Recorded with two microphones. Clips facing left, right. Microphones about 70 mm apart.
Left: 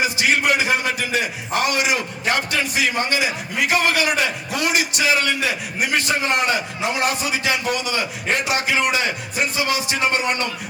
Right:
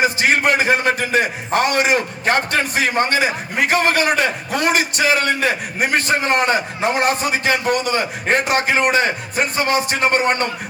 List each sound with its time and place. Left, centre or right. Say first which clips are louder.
0.0 s a man's voice: right 3 dB; right